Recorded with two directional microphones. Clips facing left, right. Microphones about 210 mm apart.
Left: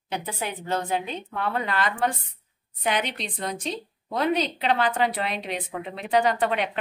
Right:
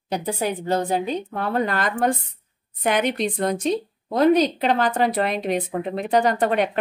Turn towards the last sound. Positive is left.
turn(degrees=-45)  # may be behind; listen again after turning